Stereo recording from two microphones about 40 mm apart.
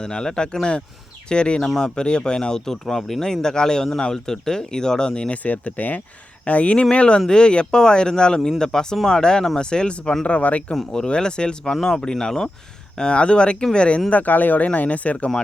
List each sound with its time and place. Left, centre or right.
0.0 s speech: centre
2.8 s speech: centre
5.3 s speech: left
10.2 s speech: left
10.9 s speech: left
14.1 s speech: left